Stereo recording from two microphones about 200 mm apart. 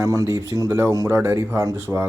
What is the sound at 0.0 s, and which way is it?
Speech, 15° right (ahead or behind).